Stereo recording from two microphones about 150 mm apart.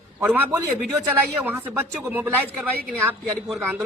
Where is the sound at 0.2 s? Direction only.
15° right (ahead or behind).